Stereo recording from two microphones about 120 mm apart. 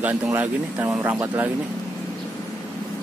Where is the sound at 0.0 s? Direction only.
15° right (ahead or behind).